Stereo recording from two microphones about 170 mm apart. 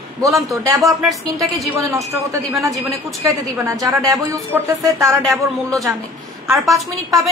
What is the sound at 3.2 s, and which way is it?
Speech, 20° right (ahead or behind).